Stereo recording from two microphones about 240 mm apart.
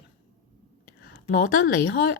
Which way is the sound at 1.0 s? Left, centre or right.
Left.